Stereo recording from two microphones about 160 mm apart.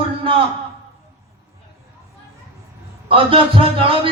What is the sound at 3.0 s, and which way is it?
A man's voice, 35° right (ahead or behind).